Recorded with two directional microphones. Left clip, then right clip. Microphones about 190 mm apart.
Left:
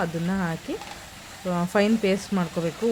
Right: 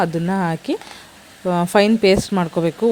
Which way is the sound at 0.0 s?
40° right (ahead or behind).